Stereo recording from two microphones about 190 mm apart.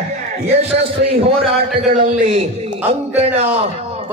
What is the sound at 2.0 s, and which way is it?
A man's voice, 45° right (ahead or behind).